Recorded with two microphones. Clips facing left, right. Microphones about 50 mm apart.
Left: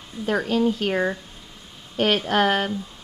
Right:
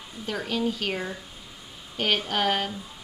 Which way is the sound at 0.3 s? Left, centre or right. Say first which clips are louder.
Left 7 dB; left.